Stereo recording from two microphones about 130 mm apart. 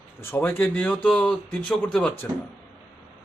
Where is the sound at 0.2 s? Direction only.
20° left (ahead or behind).